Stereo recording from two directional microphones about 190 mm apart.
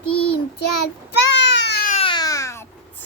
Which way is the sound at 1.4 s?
70° left (ahead or behind).